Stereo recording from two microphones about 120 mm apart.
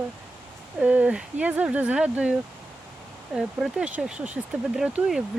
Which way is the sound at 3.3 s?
5° right (ahead or behind).